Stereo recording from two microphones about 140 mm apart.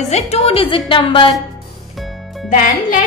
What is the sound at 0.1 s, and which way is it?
A woman's voice, 45° left (ahead or behind).